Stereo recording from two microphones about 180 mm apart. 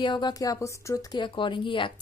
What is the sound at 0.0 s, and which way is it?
A woman's voice, 25° left (ahead or behind).